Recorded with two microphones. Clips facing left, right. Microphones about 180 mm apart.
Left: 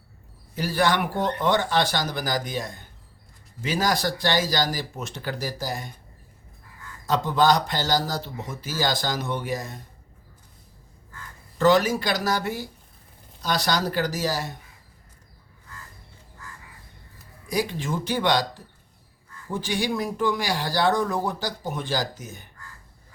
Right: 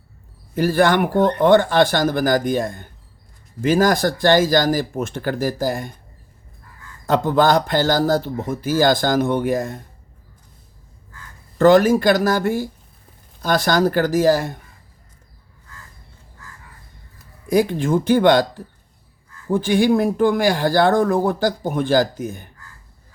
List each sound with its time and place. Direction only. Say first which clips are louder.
0.5 s speech: right 7 dB; 55° right (ahead or behind)
7.1 s speech: right 5 dB; 55° right (ahead or behind)
11.5 s speech: right 7 dB; 50° right (ahead or behind)
17.5 s speech: right 10 dB; 55° right (ahead or behind)